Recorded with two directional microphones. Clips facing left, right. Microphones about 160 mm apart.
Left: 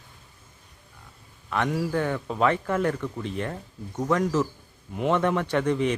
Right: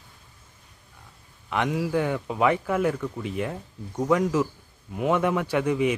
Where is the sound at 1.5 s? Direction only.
15° right (ahead or behind).